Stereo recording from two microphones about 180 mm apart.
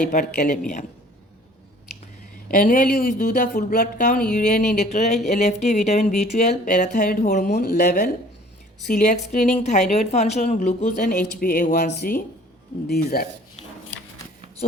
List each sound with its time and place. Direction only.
0.1 s speech: 45° left (ahead or behind)
2.5 s speech: 50° left (ahead or behind)
8.9 s speech: 45° left (ahead or behind)